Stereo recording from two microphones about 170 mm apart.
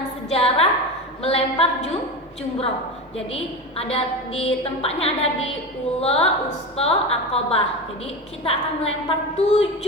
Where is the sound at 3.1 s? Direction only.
35° left (ahead or behind).